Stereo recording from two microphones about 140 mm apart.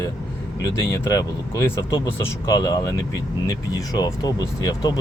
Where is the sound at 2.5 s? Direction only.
30° left (ahead or behind).